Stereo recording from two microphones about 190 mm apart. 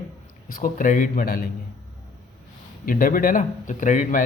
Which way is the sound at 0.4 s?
45° left (ahead or behind).